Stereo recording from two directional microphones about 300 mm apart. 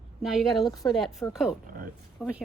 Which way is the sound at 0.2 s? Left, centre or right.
Centre.